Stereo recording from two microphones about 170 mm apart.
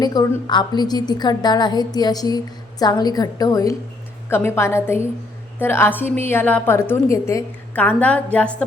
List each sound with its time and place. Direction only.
0.0 s a woman's voice: 25° left (ahead or behind); by 8.6 s 10° left (ahead or behind)